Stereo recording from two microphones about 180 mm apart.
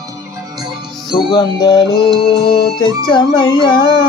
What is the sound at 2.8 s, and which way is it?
Speech, 25° left (ahead or behind).